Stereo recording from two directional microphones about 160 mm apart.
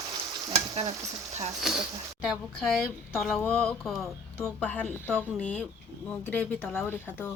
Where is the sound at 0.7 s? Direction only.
40° right (ahead or behind).